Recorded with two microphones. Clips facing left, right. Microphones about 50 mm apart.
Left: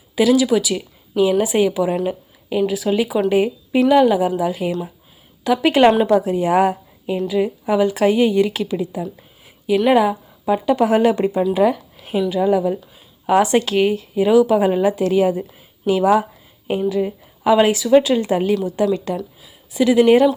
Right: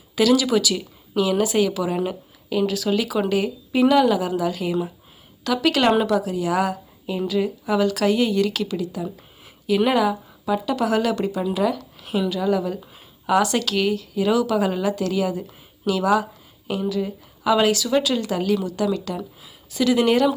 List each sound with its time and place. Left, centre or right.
0.2 s a woman's voice: centre
9.6 s speech: centre
9.9 s speech: left
11.9 s a sound: left
12.3 s a woman's voice: left